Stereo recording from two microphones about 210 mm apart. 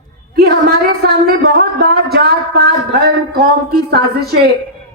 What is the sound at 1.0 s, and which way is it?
Speech, 50° right (ahead or behind).